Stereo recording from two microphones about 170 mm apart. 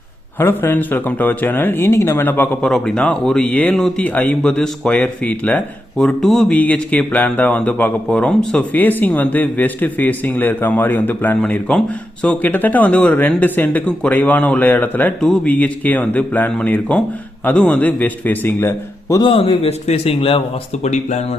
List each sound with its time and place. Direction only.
0.3 s speech: 15° left (ahead or behind)
19.2 s a man's voice: 30° left (ahead or behind)